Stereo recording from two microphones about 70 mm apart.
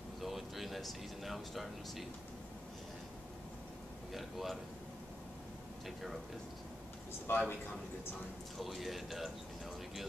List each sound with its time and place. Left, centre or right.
0.2 s speech: centre
4.1 s a man's voice: centre
7.2 s a man's voice: left
8.5 s a man's voice: centre